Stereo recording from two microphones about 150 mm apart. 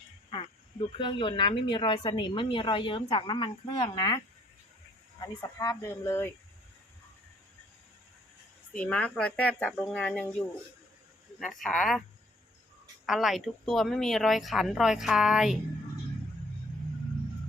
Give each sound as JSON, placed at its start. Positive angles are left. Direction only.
{"t": 0.3, "sound": "speech", "side_deg": 35}
{"t": 5.2, "sound": "speech", "side_deg": 25}
{"t": 8.7, "sound": "speech", "side_deg": 10}
{"t": 13.1, "sound": "speech", "side_deg": 0}